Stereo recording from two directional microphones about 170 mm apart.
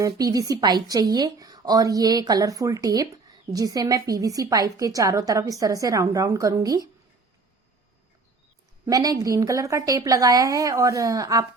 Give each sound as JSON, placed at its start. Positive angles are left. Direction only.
{"t": 0.0, "sound": "a woman's voice", "side_deg": -20}
{"t": 8.9, "sound": "a woman's voice", "side_deg": -20}